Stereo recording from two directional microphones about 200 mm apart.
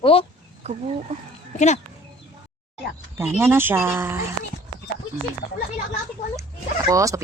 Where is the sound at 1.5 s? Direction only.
35° left (ahead or behind).